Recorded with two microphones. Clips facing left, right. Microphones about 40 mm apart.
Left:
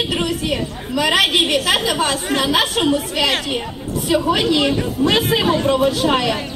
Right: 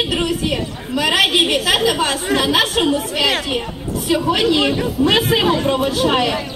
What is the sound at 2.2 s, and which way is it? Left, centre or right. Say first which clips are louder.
Speech: right 2 dB; right.